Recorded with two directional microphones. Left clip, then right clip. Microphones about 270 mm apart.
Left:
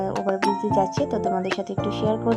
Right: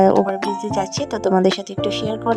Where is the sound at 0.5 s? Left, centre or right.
Right.